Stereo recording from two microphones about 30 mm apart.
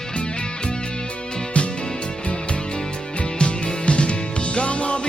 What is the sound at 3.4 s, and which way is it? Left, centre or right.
Music, left.